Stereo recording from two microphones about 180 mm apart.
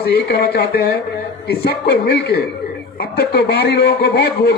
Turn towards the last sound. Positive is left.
turn(degrees=65)  # may be behind; listen again after turning